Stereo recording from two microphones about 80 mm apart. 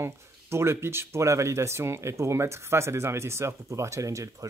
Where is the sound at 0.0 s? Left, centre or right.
Right.